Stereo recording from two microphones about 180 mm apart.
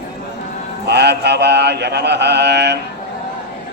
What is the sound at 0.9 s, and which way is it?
Mantra, 70° right (ahead or behind).